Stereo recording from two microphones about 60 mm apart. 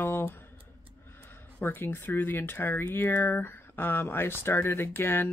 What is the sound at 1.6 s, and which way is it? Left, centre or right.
Speech, left.